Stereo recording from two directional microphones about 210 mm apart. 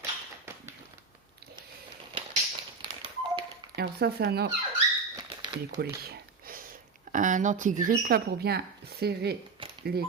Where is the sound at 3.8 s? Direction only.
50° right (ahead or behind).